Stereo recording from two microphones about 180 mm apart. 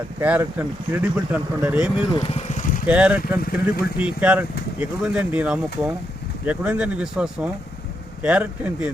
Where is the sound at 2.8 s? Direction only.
5° right (ahead or behind).